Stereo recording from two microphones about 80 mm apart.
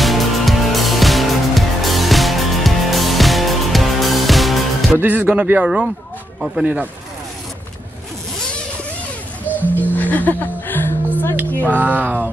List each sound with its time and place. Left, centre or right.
0.0 s music: centre
5.0 s speech: centre
9.5 s music: left
11.6 s speech: right